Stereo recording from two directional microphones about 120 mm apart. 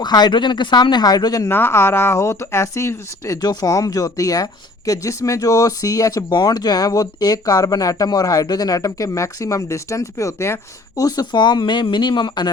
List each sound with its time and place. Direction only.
0.0 s speech: 35° left (ahead or behind)
1.5 s speech: 20° left (ahead or behind); by 12.5 s 40° left (ahead or behind)